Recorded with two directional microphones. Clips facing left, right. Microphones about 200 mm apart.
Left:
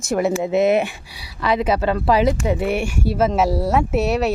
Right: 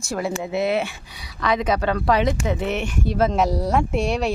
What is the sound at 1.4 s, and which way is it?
Speech, 5° left (ahead or behind).